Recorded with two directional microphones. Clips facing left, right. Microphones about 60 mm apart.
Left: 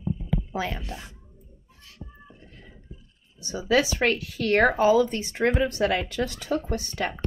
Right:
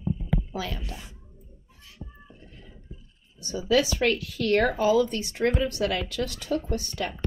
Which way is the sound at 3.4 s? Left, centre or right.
Left.